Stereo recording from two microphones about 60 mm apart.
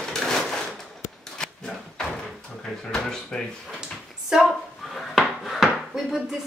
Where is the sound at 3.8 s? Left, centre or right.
Centre.